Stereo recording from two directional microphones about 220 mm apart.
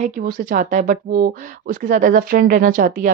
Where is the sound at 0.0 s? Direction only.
40° right (ahead or behind).